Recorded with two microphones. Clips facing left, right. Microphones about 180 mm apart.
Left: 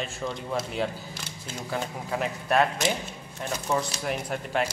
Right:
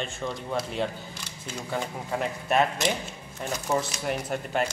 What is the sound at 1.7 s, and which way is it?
A man's voice, centre (ahead or behind).